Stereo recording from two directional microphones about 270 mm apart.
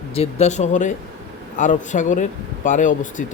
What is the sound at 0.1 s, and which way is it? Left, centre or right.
A man's voice, left.